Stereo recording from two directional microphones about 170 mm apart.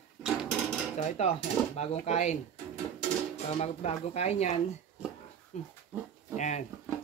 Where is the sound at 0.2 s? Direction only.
5° right (ahead or behind).